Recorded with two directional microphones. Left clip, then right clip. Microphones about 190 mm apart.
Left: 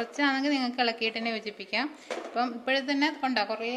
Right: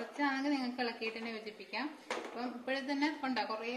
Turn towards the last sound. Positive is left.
turn(degrees=45)  # may be behind; listen again after turning